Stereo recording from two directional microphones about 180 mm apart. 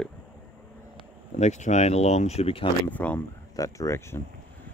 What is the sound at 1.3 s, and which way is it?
Speech, 40° left (ahead or behind).